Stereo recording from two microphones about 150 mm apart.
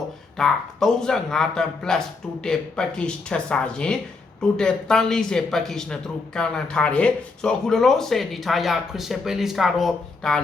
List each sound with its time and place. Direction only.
0.3 s speech: 5° left (ahead or behind)